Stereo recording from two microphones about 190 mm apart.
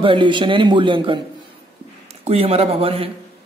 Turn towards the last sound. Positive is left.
turn(degrees=-30)  # may be behind; listen again after turning